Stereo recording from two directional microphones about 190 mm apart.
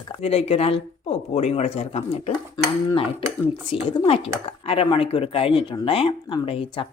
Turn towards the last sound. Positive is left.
turn(degrees=30)  # may be behind; listen again after turning